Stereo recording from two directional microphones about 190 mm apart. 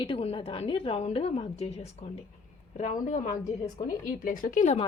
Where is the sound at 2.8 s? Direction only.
40° left (ahead or behind).